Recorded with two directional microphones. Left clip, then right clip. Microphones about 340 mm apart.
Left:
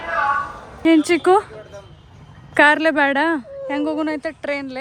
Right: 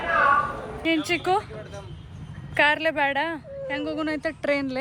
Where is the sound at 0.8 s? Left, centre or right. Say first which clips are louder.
Left 9 dB; left.